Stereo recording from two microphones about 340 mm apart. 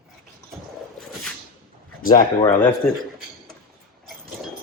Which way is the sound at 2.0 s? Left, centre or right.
Left.